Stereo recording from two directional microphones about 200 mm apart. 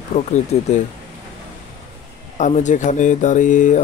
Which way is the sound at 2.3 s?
35° left (ahead or behind).